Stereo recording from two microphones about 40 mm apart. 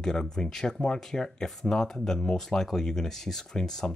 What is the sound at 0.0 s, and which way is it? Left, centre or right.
Speech, centre.